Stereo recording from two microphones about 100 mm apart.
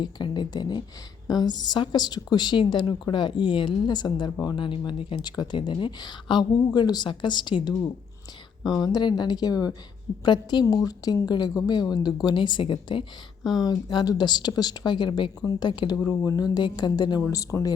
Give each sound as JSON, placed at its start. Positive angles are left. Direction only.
{"t": 0.0, "sound": "a woman's voice", "side_deg": 45}
{"t": 13.5, "sound": "a woman's voice", "side_deg": 45}